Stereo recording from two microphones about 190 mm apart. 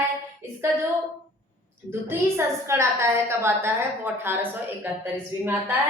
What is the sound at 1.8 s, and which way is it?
A woman's voice, 15° right (ahead or behind).